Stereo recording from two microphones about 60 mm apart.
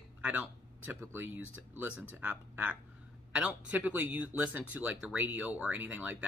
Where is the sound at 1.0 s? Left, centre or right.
Right.